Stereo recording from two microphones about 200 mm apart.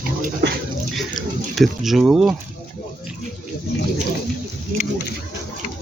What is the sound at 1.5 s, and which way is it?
Speech, centre (ahead or behind).